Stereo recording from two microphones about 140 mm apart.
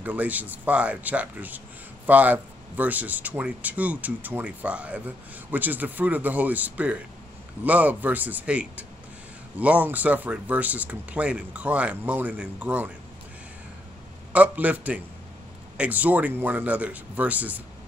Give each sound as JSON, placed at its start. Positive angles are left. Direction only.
{"t": 0.0, "sound": "speech", "side_deg": -10}
{"t": 14.3, "sound": "speech", "side_deg": -10}